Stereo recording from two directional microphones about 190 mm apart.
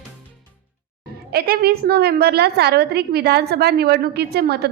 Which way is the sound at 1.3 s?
55° right (ahead or behind).